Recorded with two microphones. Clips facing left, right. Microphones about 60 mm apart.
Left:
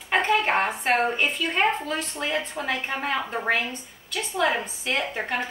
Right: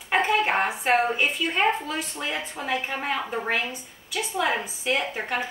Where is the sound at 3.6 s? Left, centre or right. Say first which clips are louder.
Even; centre.